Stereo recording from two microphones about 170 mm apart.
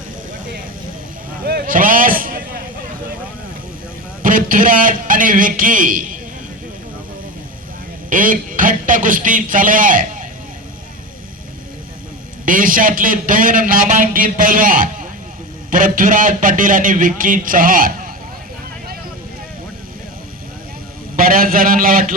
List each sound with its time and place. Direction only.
1.5 s a sound: 60° right (ahead or behind)
4.2 s a man's voice: 55° right (ahead or behind)
8.1 s a man's voice: 50° right (ahead or behind)
12.5 s a man's voice: 55° right (ahead or behind)
21.2 s speech: 55° right (ahead or behind)